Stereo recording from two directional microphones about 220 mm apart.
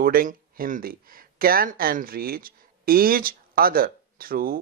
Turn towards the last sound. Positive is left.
turn(degrees=-40)  # may be behind; listen again after turning